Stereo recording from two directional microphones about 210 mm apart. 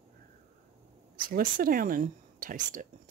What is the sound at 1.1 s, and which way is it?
Speech, 40° right (ahead or behind).